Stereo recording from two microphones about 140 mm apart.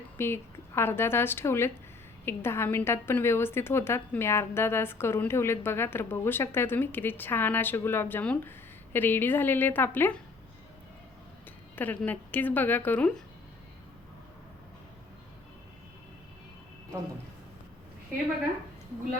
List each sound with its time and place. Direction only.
0.2 s a woman's voice: 15° left (ahead or behind)
11.8 s a woman's voice: 10° left (ahead or behind)